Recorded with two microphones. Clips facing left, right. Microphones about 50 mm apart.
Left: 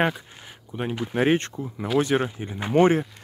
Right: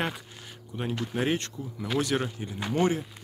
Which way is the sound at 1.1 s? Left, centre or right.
Left.